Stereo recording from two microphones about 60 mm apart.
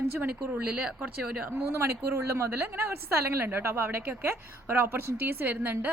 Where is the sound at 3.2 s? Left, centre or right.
Right.